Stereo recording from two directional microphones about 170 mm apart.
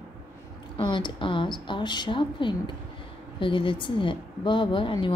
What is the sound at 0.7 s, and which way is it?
A woman's voice, 30° left (ahead or behind).